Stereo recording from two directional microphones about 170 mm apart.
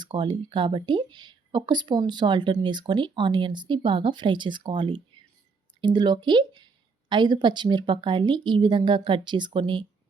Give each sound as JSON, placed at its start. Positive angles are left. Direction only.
{"t": 0.0, "sound": "speech", "side_deg": -25}